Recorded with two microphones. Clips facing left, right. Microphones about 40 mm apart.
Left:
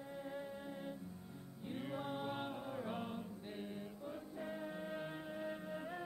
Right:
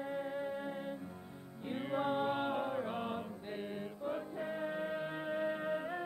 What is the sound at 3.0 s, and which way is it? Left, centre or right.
Music, right.